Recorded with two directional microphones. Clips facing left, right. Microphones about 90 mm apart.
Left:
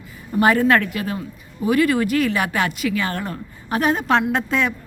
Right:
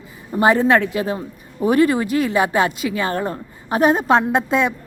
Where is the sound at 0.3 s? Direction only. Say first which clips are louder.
Right 1 dB; 25° right (ahead or behind).